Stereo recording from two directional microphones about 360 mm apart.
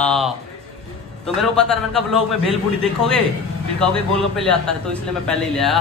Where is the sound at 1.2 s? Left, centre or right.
Centre.